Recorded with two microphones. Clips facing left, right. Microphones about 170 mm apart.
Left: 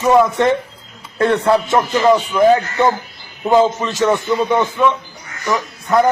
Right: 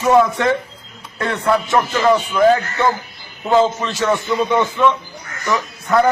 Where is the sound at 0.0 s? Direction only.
20° left (ahead or behind).